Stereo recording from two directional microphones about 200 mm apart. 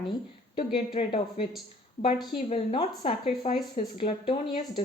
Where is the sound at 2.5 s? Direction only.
30° left (ahead or behind).